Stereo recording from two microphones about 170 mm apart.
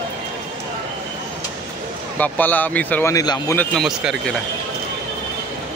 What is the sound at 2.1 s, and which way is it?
A man's voice, 10° left (ahead or behind).